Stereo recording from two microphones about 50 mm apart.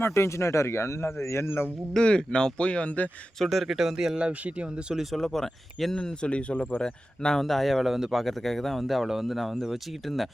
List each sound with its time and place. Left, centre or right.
0.0 s speech: left
2.0 s speech: centre
3.3 s speech: centre
4.2 s speech: right
5.1 s speech: centre
6.0 s speech: centre